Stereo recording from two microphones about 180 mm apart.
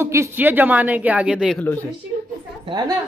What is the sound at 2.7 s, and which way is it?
Speech, 25° right (ahead or behind).